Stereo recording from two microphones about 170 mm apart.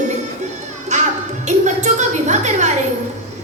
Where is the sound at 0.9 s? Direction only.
45° right (ahead or behind).